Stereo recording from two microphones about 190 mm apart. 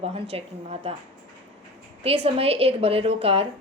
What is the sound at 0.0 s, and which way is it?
Speech, 35° right (ahead or behind).